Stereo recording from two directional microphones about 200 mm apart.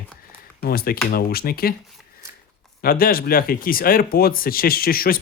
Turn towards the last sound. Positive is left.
turn(degrees=50)  # may be behind; listen again after turning